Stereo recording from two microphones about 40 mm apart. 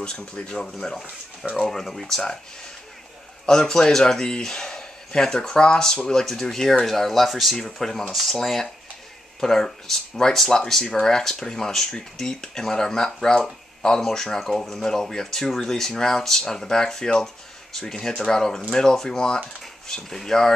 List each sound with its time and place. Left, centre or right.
0.0 s speech: left
1.7 s speech: centre
3.4 s speech: centre